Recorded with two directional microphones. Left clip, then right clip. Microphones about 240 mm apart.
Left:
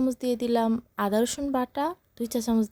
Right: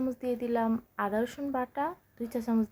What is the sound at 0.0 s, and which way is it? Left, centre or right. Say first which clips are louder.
Speech: left 5 dB; left.